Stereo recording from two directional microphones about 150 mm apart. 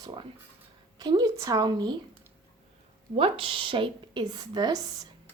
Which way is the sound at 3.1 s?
35° right (ahead or behind).